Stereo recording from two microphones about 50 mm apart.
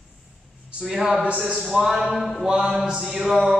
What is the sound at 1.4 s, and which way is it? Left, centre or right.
A man's voice, centre.